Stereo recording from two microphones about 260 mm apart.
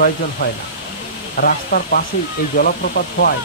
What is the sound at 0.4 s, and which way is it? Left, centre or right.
Sizzle, left.